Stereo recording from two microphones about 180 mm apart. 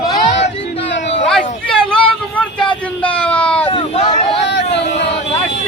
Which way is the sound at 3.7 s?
35° left (ahead or behind).